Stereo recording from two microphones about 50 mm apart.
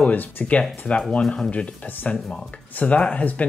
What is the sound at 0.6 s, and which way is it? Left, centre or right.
Speech, left.